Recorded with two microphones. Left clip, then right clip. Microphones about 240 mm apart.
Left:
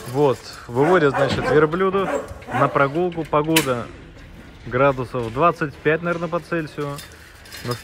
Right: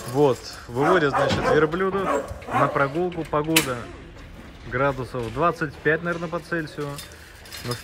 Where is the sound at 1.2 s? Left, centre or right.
Centre.